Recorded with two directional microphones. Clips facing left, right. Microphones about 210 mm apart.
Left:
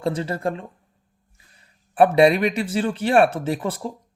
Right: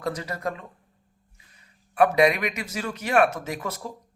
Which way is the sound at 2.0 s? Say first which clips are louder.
Left 5 dB; 30° left (ahead or behind).